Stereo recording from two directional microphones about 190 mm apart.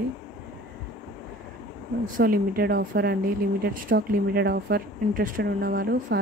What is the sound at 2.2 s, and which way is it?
Speech, 50° right (ahead or behind).